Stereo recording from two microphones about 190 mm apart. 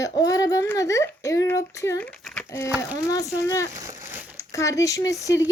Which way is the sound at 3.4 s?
15° left (ahead or behind).